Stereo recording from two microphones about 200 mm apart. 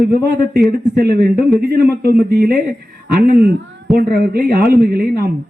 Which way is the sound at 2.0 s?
50° right (ahead or behind).